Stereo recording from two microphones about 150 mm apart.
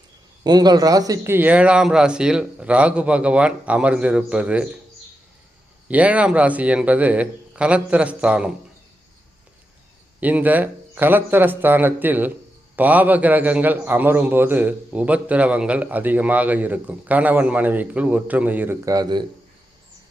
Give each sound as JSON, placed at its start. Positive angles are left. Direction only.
{"t": 0.4, "sound": "a man's voice", "side_deg": -25}
{"t": 5.9, "sound": "a man's voice", "side_deg": -10}
{"t": 10.2, "sound": "a man's voice", "side_deg": -10}
{"t": 18.9, "sound": "speech", "side_deg": -25}